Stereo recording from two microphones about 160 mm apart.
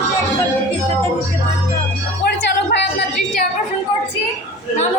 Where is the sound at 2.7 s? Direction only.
90° left.